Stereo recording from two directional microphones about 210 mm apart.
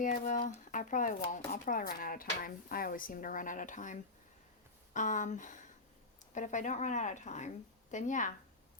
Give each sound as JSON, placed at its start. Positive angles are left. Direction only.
{"t": 0.0, "sound": "a woman's voice", "side_deg": 35}
{"t": 4.9, "sound": "a woman's voice", "side_deg": 35}